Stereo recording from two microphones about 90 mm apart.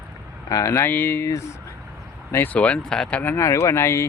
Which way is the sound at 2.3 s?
20° left (ahead or behind).